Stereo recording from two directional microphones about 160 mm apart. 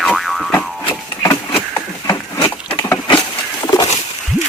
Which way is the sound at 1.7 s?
20° left (ahead or behind).